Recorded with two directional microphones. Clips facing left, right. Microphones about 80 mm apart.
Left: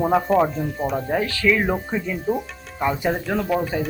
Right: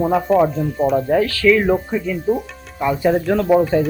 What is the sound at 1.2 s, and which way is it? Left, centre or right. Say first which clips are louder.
Speech: right 5 dB; left.